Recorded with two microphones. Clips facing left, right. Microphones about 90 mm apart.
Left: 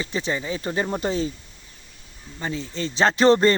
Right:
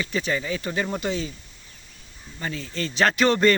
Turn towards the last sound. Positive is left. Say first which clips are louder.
# left 3 dB
turn(degrees=30)  # may be behind; listen again after turning